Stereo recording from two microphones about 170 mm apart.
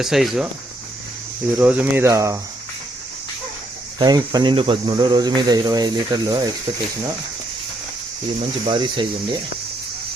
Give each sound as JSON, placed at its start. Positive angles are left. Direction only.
{"t": 0.0, "sound": "speech", "side_deg": 0}
{"t": 1.5, "sound": "speech", "side_deg": -10}
{"t": 3.9, "sound": "speech", "side_deg": -25}
{"t": 8.6, "sound": "speech", "side_deg": -30}